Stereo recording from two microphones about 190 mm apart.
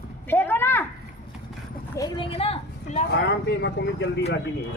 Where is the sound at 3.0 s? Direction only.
60° left (ahead or behind).